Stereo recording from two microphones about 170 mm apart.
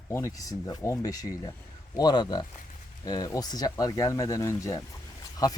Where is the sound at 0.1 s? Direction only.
20° left (ahead or behind).